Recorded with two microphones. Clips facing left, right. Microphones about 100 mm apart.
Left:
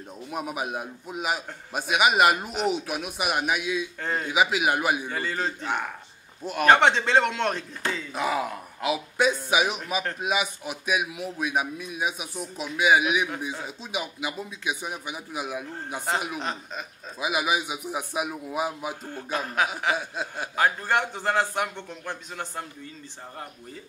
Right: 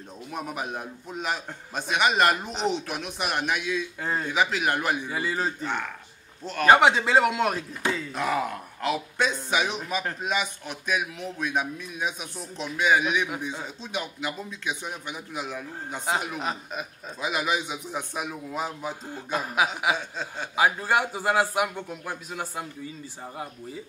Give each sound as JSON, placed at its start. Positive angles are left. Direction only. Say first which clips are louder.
{"t": 0.3, "sound": "a man's voice", "louder": "left 2 dB", "side_deg": 10}
{"t": 4.0, "sound": "speech", "louder": "even", "side_deg": -5}
{"t": 4.3, "sound": "a man's voice", "louder": "left 3 dB", "side_deg": 10}
{"t": 5.0, "sound": "a man's voice", "louder": "right 1 dB", "side_deg": -5}
{"t": 6.4, "sound": "a man's voice", "louder": "left 1 dB", "side_deg": 10}
{"t": 6.7, "sound": "a man's voice", "louder": "right 1 dB", "side_deg": -5}
{"t": 16.3, "sound": "a man's voice", "louder": "right 1 dB", "side_deg": -5}
{"t": 17.2, "sound": "a man's voice", "louder": "left 1 dB", "side_deg": 10}
{"t": 19.0, "sound": "a man's voice", "louder": "right 1 dB", "side_deg": -10}
{"t": 20.0, "sound": "a man's voice", "louder": "left 2 dB", "side_deg": 10}
{"t": 20.5, "sound": "a man's voice", "louder": "right 1 dB", "side_deg": -10}